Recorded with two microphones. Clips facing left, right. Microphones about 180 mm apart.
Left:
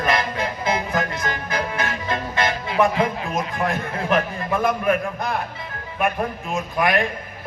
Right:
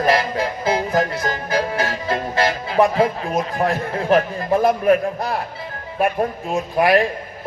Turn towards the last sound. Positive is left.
turn(degrees=-35)  # may be behind; listen again after turning